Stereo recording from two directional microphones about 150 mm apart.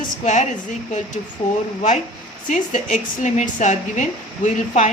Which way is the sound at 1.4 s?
35° left (ahead or behind).